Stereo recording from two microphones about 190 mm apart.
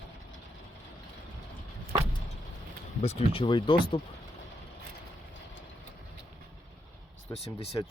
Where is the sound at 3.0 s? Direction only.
35° left (ahead or behind).